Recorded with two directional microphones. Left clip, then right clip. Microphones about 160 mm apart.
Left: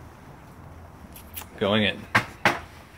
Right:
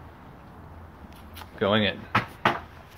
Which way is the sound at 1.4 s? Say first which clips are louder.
Even; 5° left (ahead or behind).